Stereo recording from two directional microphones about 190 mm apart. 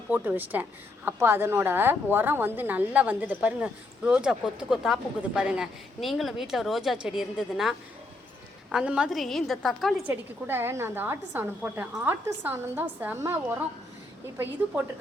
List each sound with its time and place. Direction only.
0.1 s a woman's voice: 10° right (ahead or behind)
10.1 s a woman's voice: 10° right (ahead or behind)